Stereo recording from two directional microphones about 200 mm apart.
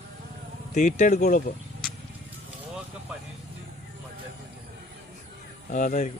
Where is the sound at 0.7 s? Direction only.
40° left (ahead or behind).